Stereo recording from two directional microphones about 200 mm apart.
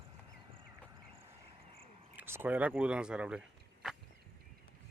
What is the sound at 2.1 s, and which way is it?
Speech, 10° right (ahead or behind).